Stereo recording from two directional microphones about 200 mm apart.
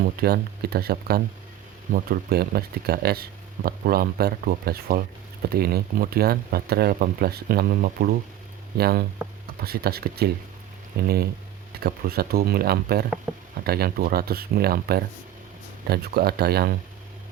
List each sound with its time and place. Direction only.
0.0 s speech: 50° right (ahead or behind)
13.3 s a sound: 10° right (ahead or behind)
13.7 s speech: 50° right (ahead or behind)